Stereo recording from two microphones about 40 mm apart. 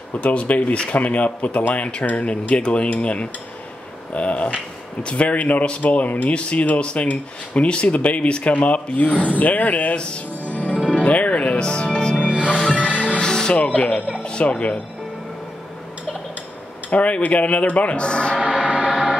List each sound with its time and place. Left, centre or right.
0.2 s speech: left
2.5 s speech: left
5.4 s speech: left
9.9 s speech: left
10.4 s music: left
11.6 s speech: left
12.3 s music: right
12.8 s music: left
13.2 s music: centre
13.6 s speech: left
16.9 s speech: left
18.4 s music: right